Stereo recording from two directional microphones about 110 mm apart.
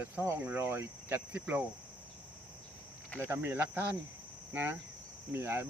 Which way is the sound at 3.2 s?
20° right (ahead or behind).